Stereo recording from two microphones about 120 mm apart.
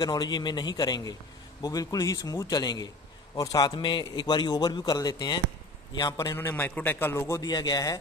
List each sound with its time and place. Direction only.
0.0 s a man's voice: 35° left (ahead or behind)
6.3 s a man's voice: 20° left (ahead or behind)
7.4 s a man's voice: 35° left (ahead or behind)